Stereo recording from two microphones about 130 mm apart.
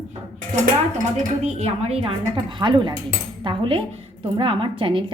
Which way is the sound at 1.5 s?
55° right (ahead or behind).